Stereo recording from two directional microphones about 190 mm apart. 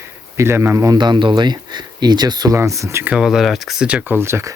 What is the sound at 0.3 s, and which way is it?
Speech, 15° right (ahead or behind).